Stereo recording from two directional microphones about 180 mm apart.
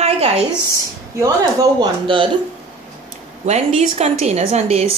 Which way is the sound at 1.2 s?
20° right (ahead or behind).